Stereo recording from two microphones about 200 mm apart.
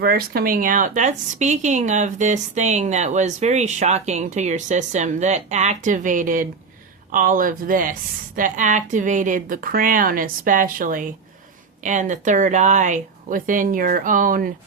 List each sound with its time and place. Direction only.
0.0 s a woman's voice: 50° right (ahead or behind)